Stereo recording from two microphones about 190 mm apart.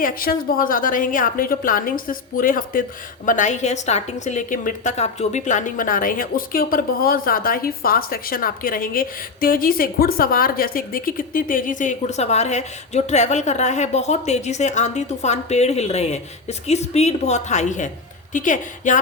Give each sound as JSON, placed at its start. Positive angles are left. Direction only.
{"t": 0.0, "sound": "a woman's voice", "side_deg": 50}